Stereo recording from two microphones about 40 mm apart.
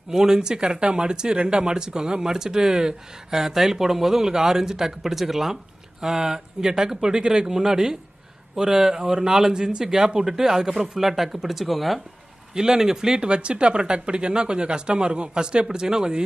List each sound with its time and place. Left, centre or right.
0.1 s speech: centre
12.5 s speech: centre